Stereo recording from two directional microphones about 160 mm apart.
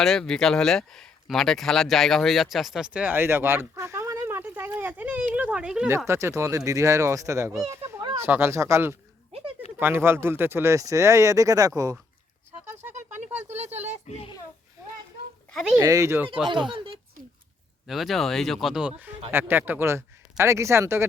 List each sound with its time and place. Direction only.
0.0 s speech: centre (ahead or behind)
6.1 s speech: 15° right (ahead or behind)
13.1 s a sound: 10° right (ahead or behind)
13.5 s a sound: 45° right (ahead or behind)
14.1 s a child's voice: 40° left (ahead or behind)
15.5 s speech: 5° right (ahead or behind)
15.8 s speech: 20° right (ahead or behind)
16.5 s speech: 30° right (ahead or behind)
17.8 s speech: centre (ahead or behind); by 21.1 s 15° right (ahead or behind)